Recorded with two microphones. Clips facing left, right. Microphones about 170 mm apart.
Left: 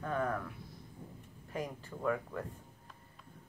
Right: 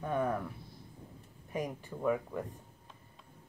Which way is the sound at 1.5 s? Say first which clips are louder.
Right 3 dB; 15° right (ahead or behind).